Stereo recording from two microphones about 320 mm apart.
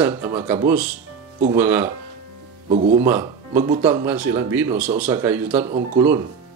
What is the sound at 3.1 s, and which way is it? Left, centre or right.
Speech, centre.